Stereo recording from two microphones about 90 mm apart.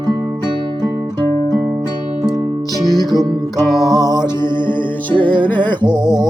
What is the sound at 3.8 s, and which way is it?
Music, 50° right (ahead or behind).